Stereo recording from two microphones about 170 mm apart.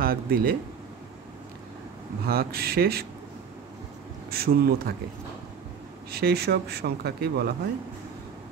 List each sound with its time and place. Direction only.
0.0 s speech: 60° right (ahead or behind)
2.2 s speech: 65° right (ahead or behind)
4.3 s speech: 65° right (ahead or behind)
6.1 s speech: 70° right (ahead or behind)